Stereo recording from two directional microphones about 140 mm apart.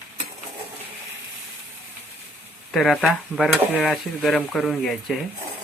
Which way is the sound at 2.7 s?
Centre (ahead or behind).